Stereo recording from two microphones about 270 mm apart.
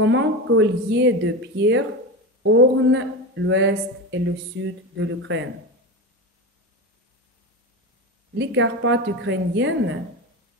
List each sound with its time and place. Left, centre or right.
0.0 s speech: right
8.4 s speech: right